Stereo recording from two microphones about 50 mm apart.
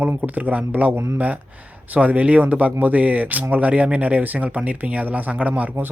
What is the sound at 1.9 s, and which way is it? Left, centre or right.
Speech, right.